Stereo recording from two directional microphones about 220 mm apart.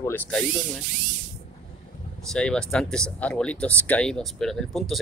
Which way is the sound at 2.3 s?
5° left (ahead or behind).